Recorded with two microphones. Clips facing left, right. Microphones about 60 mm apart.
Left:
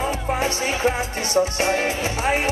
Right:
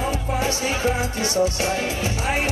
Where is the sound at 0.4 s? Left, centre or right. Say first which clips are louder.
Left 1 dB; left.